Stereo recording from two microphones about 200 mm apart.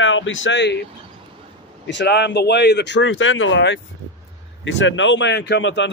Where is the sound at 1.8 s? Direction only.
60° left (ahead or behind).